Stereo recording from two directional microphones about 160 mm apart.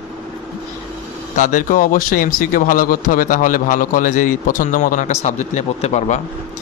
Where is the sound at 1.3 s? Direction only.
55° left (ahead or behind).